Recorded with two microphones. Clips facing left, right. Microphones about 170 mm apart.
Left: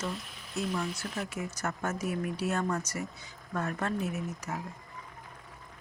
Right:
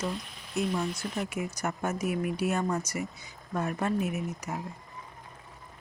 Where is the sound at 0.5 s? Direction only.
10° right (ahead or behind).